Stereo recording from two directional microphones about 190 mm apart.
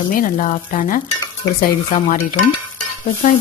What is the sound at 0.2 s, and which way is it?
A woman's voice, 45° left (ahead or behind).